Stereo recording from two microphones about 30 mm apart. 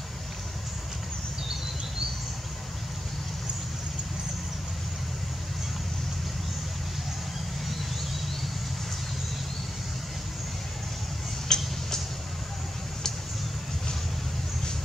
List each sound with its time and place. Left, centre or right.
11.4 s tick-tock: centre